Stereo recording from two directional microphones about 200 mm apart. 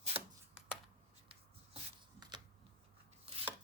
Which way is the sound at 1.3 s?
25° right (ahead or behind).